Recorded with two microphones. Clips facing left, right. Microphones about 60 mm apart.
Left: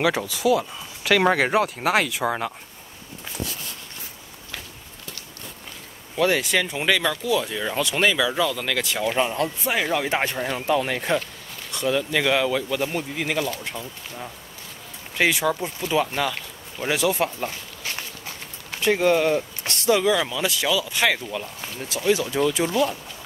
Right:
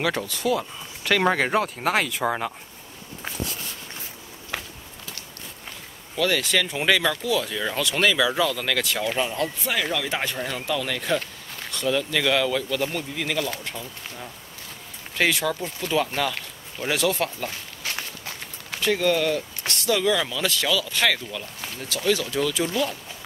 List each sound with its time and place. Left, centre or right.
0.0 s speech: centre
6.1 s speech: left
6.7 s speech: centre
9.0 s speech: centre
11.7 s speech: centre